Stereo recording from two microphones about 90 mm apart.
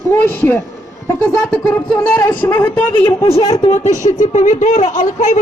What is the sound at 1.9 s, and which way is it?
A woman's voice, 30° left (ahead or behind).